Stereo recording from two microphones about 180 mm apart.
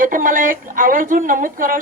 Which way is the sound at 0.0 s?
50° right (ahead or behind).